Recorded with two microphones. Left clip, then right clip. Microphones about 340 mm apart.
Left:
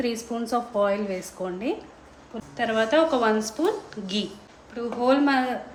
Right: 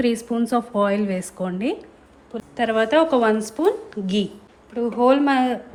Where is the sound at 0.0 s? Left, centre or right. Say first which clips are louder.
Right 6 dB; right.